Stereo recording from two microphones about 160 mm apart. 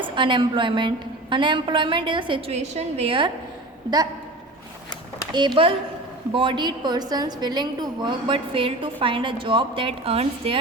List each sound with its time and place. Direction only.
0.0 s a woman's voice: 30° right (ahead or behind)
2.6 s a woman's voice: 40° right (ahead or behind)
5.3 s a woman's voice: 30° right (ahead or behind)